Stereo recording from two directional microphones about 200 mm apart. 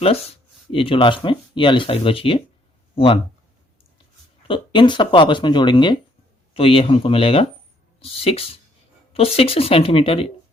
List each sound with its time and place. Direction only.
0.7 s speech: 25° left (ahead or behind)
4.4 s speech: 25° left (ahead or behind)